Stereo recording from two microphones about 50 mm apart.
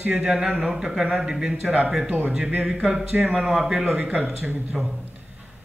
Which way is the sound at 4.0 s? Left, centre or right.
Right.